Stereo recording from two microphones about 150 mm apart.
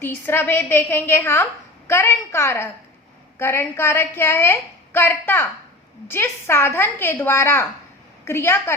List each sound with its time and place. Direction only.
0.0 s a woman's voice: 15° left (ahead or behind)